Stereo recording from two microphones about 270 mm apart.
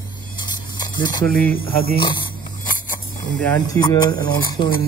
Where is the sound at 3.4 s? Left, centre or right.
Centre.